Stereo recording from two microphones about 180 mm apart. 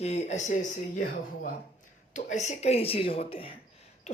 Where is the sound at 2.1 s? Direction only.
45° left (ahead or behind).